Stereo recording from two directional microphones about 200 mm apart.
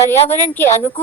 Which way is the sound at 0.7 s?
35° left (ahead or behind).